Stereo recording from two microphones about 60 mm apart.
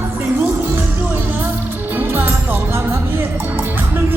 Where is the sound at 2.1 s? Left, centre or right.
Right.